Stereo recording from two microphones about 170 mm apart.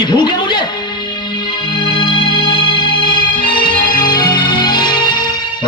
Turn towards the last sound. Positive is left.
turn(degrees=25)  # may be behind; listen again after turning